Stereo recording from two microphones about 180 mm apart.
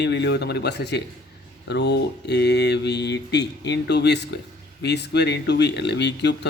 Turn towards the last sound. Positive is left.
turn(degrees=70)  # may be behind; listen again after turning